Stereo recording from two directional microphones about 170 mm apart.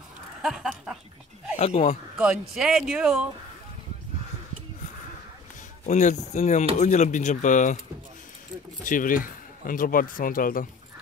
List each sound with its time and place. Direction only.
0.4 s speech: 5° right (ahead or behind)
1.6 s speech: 40° left (ahead or behind)
2.2 s speech: 5° right (ahead or behind)
5.9 s speech: 45° left (ahead or behind)
8.8 s speech: 55° left (ahead or behind)